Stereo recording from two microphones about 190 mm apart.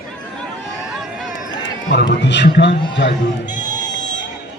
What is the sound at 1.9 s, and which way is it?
Speech, 65° left (ahead or behind).